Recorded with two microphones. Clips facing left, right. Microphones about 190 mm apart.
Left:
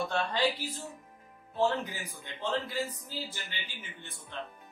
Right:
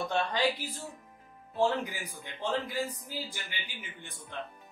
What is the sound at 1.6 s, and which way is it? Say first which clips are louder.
A man's voice: right 1 dB; 15° right (ahead or behind).